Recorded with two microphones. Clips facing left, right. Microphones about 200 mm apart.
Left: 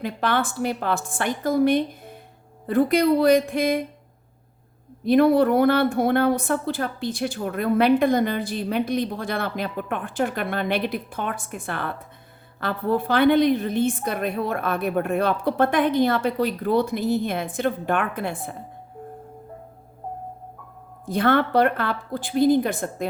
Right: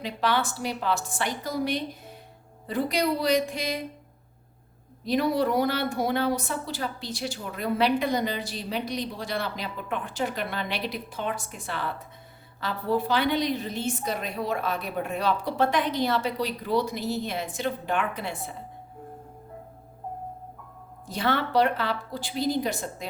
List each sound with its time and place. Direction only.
0.0 s a woman's voice: 55° left (ahead or behind)
5.0 s speech: 55° left (ahead or behind)
21.1 s speech: 55° left (ahead or behind)